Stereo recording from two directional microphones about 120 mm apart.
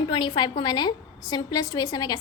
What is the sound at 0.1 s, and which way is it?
A woman's voice, 40° left (ahead or behind).